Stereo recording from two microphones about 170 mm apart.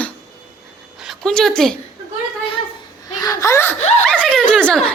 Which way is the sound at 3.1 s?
20° left (ahead or behind).